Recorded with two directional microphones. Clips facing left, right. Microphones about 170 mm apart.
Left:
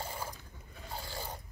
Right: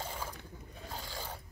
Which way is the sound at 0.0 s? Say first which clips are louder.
Even; 10° left (ahead or behind).